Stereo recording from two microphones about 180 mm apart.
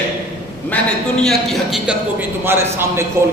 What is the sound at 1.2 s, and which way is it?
A man's voice, centre (ahead or behind).